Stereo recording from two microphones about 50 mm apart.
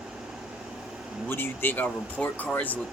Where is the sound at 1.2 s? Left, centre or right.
Left.